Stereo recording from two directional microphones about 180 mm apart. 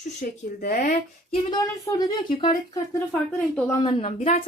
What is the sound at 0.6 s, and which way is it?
Speech, 50° left (ahead or behind).